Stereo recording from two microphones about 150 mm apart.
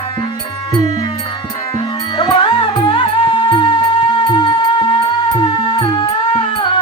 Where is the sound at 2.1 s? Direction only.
35° left (ahead or behind).